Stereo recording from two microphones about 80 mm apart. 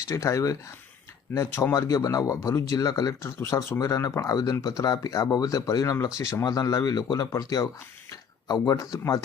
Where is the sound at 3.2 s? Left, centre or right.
Left.